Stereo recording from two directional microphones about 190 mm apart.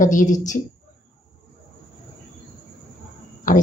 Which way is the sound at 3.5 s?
45° left (ahead or behind).